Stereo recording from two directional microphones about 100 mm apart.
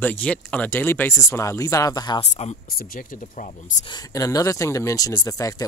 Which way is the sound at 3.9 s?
40° left (ahead or behind).